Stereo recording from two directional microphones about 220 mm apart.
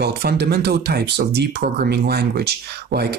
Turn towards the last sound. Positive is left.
turn(degrees=-45)  # may be behind; listen again after turning